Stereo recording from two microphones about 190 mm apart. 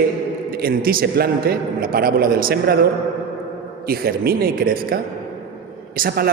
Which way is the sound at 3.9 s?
55° right (ahead or behind).